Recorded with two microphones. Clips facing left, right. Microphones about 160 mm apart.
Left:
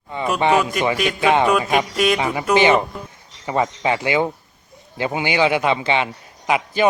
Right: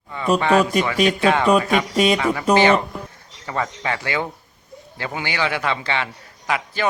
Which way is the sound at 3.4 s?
20° left (ahead or behind).